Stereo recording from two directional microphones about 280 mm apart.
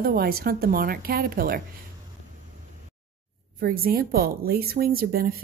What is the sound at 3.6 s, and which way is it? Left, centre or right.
Speech, right.